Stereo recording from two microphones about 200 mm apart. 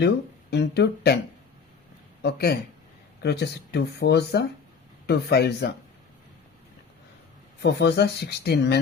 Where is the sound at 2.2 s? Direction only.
55° left (ahead or behind).